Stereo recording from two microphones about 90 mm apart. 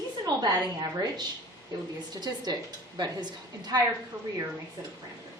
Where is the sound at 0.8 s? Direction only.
45° right (ahead or behind).